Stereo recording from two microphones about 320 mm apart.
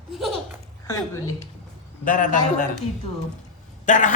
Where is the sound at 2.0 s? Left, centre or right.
Left.